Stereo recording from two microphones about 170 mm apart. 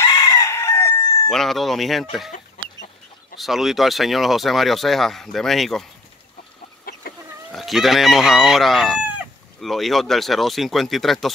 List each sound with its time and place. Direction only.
0.0 s chicken: 20° left (ahead or behind)
1.3 s speech: centre (ahead or behind)
3.3 s speech: centre (ahead or behind)
6.9 s chicken: 60° left (ahead or behind)
7.5 s speech: centre (ahead or behind)